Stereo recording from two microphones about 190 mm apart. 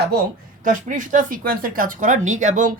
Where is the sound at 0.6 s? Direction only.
45° right (ahead or behind).